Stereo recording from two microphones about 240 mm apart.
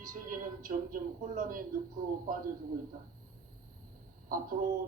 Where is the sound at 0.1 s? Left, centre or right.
Right.